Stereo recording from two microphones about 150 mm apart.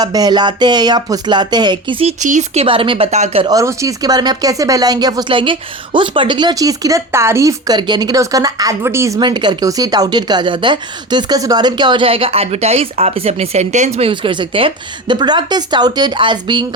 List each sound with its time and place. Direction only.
0.0 s speech: 25° right (ahead or behind)
2.2 s speech: 55° right (ahead or behind)
2.6 s a woman's voice: 35° right (ahead or behind)
3.4 s speech: 25° right (ahead or behind); by 14.1 s 50° right (ahead or behind)
14.1 s a woman's voice: 30° right (ahead or behind)